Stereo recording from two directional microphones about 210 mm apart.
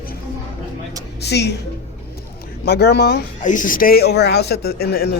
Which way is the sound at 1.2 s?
50° left (ahead or behind).